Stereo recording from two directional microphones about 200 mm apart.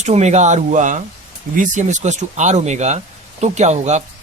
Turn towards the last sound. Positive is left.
turn(degrees=-35)  # may be behind; listen again after turning